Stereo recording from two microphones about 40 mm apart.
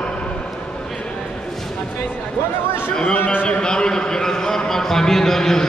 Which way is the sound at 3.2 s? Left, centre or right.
Left.